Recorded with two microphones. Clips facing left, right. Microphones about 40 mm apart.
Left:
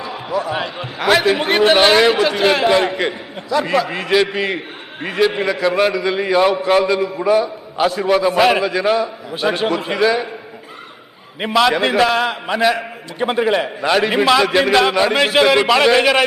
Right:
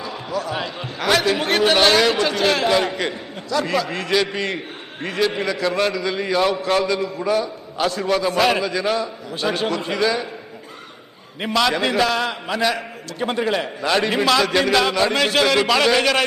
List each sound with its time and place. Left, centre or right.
0.0 s a man's voice: centre
11.3 s a man's voice: centre